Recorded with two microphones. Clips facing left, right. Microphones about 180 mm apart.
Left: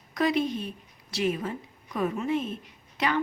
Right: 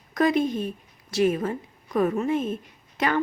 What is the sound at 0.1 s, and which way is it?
A woman's voice, 50° right (ahead or behind).